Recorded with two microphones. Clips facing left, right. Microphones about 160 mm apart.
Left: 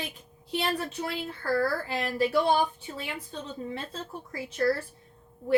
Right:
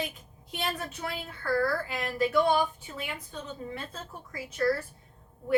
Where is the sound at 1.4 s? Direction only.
30° left (ahead or behind).